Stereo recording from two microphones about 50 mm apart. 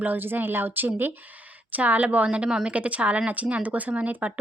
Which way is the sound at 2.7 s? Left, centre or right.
Right.